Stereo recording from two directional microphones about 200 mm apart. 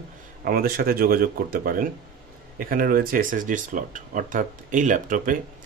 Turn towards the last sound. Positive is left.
turn(degrees=-40)  # may be behind; listen again after turning